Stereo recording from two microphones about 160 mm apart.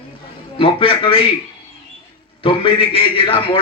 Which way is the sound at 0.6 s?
35° left (ahead or behind).